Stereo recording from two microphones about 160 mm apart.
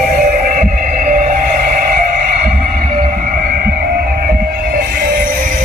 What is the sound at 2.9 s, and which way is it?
Music, 55° right (ahead or behind).